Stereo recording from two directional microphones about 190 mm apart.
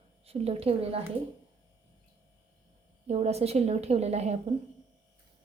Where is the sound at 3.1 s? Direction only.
35° right (ahead or behind).